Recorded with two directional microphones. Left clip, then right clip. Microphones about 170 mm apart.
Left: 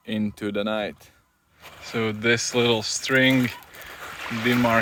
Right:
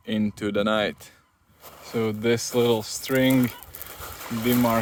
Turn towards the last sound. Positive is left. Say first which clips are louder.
# left 2 dB
turn(degrees=-20)  # may be behind; listen again after turning